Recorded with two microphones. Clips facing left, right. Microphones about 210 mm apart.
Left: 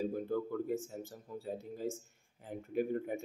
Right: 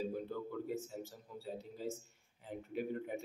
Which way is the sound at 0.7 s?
50° left (ahead or behind).